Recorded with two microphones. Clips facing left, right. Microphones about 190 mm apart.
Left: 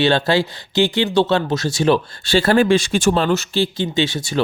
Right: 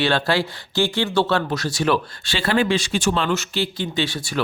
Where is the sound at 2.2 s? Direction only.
45° left (ahead or behind).